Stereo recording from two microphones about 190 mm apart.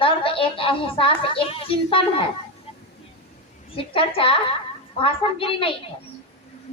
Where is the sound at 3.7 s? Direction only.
30° left (ahead or behind).